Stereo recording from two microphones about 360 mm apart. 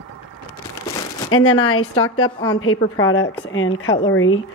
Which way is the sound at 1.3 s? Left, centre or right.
Left.